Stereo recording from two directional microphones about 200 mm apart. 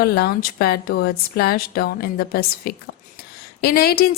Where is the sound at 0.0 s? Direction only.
50° left (ahead or behind).